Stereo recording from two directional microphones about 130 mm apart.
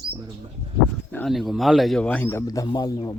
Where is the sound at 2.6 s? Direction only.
30° left (ahead or behind).